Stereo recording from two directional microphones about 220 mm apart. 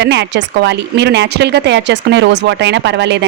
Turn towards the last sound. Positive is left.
turn(degrees=-50)  # may be behind; listen again after turning